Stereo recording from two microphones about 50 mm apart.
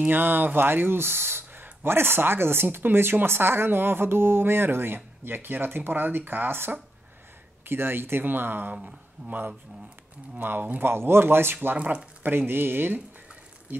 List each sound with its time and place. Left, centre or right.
0.0 s speech: right
10.4 s speech: right
11.7 s speech: right
12.2 s speech: right